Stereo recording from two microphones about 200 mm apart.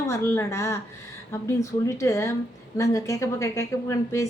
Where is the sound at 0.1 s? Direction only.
15° left (ahead or behind).